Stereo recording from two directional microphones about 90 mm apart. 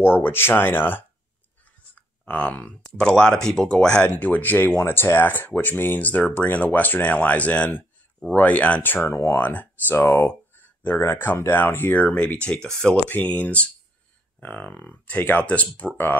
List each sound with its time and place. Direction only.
0.0 s speech: 25° left (ahead or behind)
2.0 s a sound: 15° left (ahead or behind)
2.9 s speech: 10° left (ahead or behind)
12.9 s speech: 20° left (ahead or behind)